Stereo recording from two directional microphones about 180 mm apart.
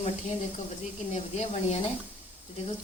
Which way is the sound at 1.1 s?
35° left (ahead or behind).